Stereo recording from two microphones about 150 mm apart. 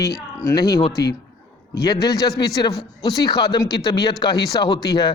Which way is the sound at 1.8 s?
25° left (ahead or behind).